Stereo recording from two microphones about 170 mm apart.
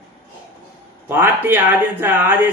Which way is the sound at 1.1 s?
10° right (ahead or behind).